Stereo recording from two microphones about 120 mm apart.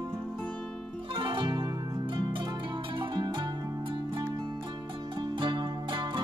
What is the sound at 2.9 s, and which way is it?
Music, 40° right (ahead or behind).